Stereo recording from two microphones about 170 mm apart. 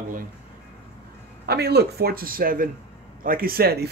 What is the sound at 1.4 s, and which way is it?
Speech, 70° right (ahead or behind).